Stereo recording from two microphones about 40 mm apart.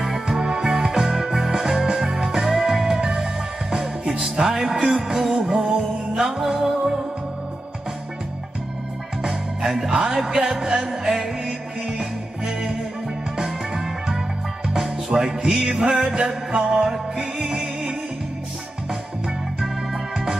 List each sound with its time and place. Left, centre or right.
0.0 s music: centre
4.4 s music: centre
9.2 s music: centre
19.6 s organ: centre